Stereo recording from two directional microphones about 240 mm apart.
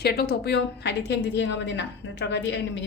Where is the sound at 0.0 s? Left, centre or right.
Left.